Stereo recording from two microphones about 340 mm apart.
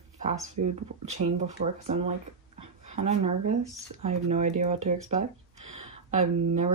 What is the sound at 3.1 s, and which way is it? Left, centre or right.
Speech, centre.